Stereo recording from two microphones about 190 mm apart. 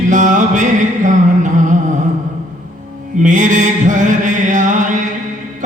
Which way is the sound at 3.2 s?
40° right (ahead or behind).